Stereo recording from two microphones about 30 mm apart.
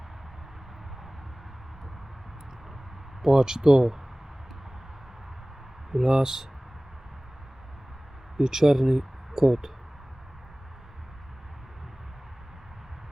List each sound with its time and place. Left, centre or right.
3.2 s speech: centre
5.9 s speech: centre
8.4 s speech: centre